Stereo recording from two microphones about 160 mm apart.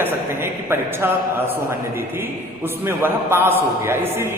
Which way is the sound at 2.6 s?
15° right (ahead or behind).